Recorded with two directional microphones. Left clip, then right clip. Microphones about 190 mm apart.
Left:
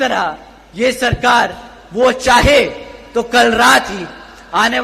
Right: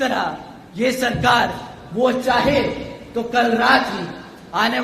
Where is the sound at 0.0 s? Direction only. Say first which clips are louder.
Left 5 dB; 30° left (ahead or behind).